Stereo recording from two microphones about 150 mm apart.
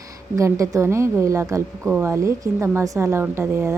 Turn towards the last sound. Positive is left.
turn(degrees=-15)  # may be behind; listen again after turning